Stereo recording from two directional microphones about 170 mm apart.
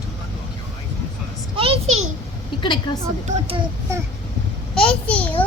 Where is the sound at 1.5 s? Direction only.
35° right (ahead or behind).